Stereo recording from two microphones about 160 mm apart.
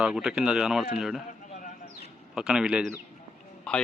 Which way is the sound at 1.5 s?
55° left (ahead or behind).